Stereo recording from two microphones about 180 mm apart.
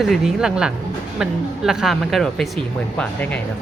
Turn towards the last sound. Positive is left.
turn(degrees=5)  # may be behind; listen again after turning